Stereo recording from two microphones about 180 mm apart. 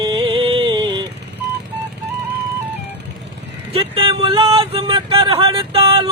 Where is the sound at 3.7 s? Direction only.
30° right (ahead or behind).